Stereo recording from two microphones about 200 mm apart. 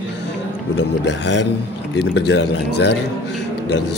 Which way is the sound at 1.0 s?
60° left (ahead or behind).